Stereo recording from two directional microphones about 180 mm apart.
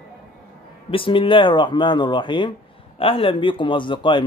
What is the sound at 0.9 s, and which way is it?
Speech, 30° left (ahead or behind).